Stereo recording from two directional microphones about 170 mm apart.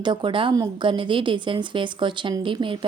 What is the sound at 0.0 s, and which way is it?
A woman's voice, 25° right (ahead or behind).